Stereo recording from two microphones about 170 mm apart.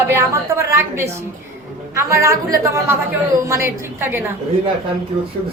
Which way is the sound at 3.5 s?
15° right (ahead or behind).